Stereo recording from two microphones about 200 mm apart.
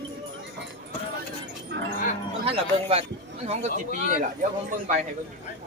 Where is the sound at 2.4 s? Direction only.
30° right (ahead or behind).